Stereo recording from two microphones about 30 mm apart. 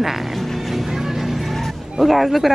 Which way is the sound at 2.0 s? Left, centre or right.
Centre.